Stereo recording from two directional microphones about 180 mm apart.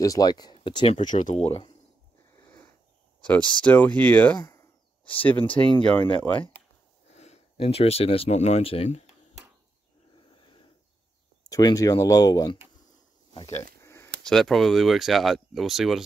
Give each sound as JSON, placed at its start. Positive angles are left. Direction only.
{"t": 0.0, "sound": "speech", "side_deg": 20}
{"t": 1.0, "sound": "speech", "side_deg": 45}
{"t": 2.3, "sound": "sniff", "side_deg": 15}
{"t": 3.2, "sound": "a sound", "side_deg": 5}
{"t": 3.6, "sound": "speech", "side_deg": 10}
{"t": 4.4, "sound": "a sound", "side_deg": 20}
{"t": 5.6, "sound": "speech", "side_deg": 5}
{"t": 7.1, "sound": "speech", "side_deg": 40}
{"t": 10.3, "sound": "a sound", "side_deg": 25}
{"t": 11.4, "sound": "speech", "side_deg": 20}
{"t": 13.7, "sound": "a sound", "side_deg": 15}
{"t": 14.2, "sound": "speech", "side_deg": 0}